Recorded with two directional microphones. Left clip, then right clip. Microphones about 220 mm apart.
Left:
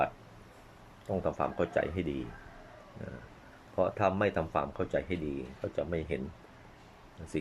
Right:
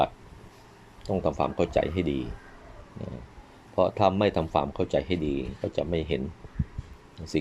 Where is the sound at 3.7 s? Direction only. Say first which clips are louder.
Right 6 dB; 20° right (ahead or behind).